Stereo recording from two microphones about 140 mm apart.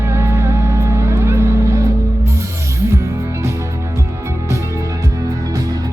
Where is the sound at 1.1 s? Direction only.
20° right (ahead or behind).